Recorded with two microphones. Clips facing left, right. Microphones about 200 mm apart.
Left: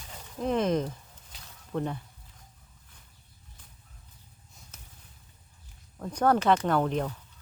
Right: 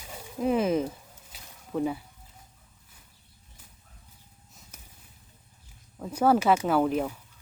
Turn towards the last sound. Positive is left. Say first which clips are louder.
# right 2 dB
turn(degrees=-5)  # may be behind; listen again after turning